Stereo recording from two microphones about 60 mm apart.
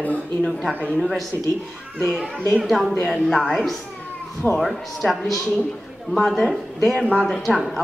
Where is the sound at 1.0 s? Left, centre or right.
Centre.